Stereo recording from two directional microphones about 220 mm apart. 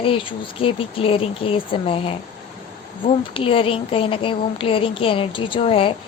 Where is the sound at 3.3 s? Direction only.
25° left (ahead or behind).